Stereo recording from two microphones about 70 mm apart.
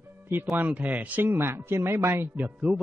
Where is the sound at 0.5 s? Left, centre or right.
Right.